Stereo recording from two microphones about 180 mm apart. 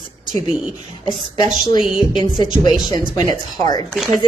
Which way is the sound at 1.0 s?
25° left (ahead or behind).